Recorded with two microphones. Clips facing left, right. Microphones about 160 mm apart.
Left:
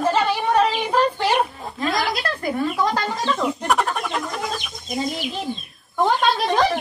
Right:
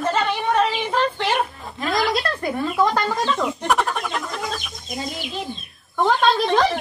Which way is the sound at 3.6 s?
Centre (ahead or behind).